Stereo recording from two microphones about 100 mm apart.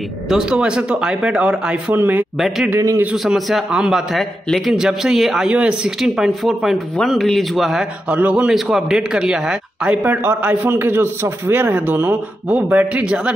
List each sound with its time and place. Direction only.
0.3 s a man's voice: 5° right (ahead or behind)
2.3 s a man's voice: 5° right (ahead or behind)
2.7 s a man's voice: 25° right (ahead or behind)
3.1 s a man's voice: 5° right (ahead or behind)
8.2 s a man's voice: 15° right (ahead or behind)
8.5 s a man's voice: 5° right (ahead or behind)
10.2 s a man's voice: 20° right (ahead or behind)